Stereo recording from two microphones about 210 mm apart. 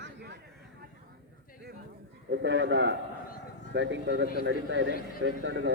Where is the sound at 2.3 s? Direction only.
55° right (ahead or behind).